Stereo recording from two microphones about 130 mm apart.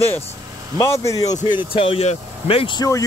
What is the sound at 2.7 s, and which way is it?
Speech, 25° left (ahead or behind).